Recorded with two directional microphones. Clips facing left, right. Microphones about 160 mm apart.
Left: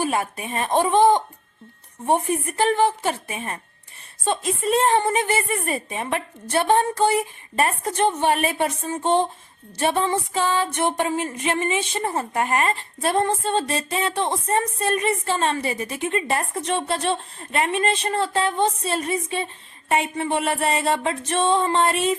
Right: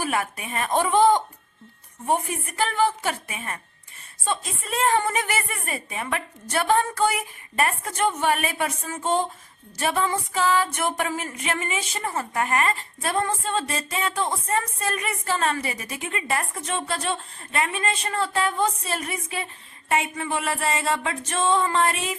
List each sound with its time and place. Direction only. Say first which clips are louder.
0.0 s music: left 3 dB; 30° left (ahead or behind)